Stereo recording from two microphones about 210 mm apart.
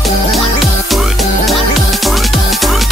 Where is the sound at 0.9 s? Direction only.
Centre (ahead or behind).